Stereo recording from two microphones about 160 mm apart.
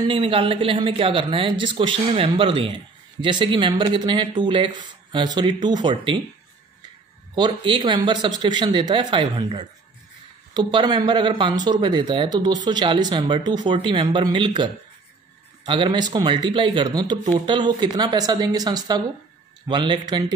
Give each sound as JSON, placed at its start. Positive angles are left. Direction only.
{"t": 0.1, "sound": "speech", "side_deg": -35}
{"t": 7.3, "sound": "speech", "side_deg": -30}